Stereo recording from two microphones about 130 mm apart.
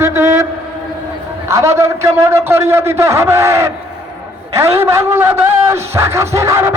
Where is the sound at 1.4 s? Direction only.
20° right (ahead or behind).